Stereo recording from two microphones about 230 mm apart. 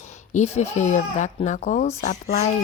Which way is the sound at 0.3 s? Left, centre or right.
Left.